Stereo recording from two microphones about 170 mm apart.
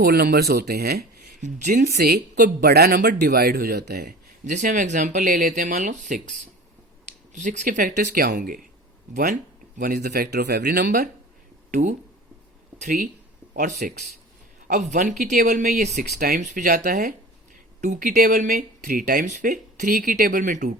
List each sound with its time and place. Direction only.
0.0 s speech: 65° right (ahead or behind)
1.4 s speech: 45° right (ahead or behind)
1.8 s speech: 70° right (ahead or behind); by 6.3 s 45° right (ahead or behind)
7.3 s speech: 45° right (ahead or behind)
16.1 s speech: 65° right (ahead or behind)
16.4 s speech: 45° right (ahead or behind)